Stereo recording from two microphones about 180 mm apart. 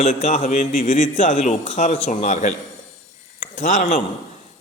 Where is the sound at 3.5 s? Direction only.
45° left (ahead or behind).